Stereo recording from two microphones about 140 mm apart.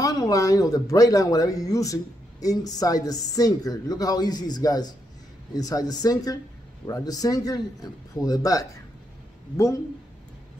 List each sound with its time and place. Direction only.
0.0 s speech: 25° left (ahead or behind)